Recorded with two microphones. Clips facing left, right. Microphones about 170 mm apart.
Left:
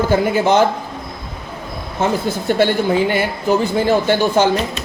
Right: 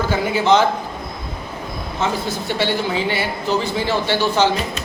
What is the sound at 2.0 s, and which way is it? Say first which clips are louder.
A woman's voice: left 4 dB; 50° left (ahead or behind).